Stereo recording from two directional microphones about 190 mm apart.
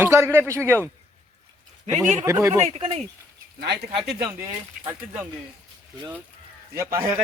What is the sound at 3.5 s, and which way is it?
Speech, 60° right (ahead or behind).